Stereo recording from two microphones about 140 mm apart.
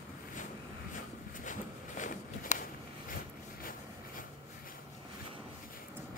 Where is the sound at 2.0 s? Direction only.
65° left (ahead or behind).